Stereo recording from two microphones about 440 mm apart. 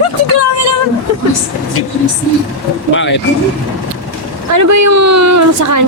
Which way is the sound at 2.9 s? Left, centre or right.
Left.